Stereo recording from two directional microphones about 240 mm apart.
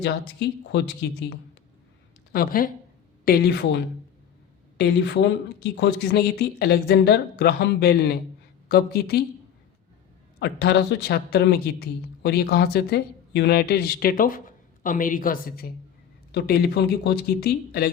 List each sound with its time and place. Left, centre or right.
0.0 s speech: left
2.3 s speech: left
10.4 s speech: left